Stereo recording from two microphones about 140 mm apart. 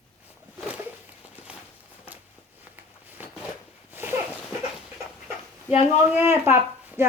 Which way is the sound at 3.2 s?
10° right (ahead or behind).